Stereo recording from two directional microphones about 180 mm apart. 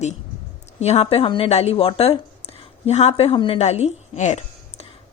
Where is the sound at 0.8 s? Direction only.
35° left (ahead or behind).